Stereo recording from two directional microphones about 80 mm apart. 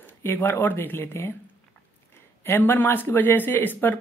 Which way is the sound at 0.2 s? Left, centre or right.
Left.